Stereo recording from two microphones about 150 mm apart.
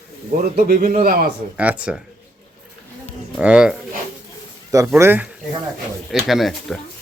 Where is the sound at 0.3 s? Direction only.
70° right (ahead or behind).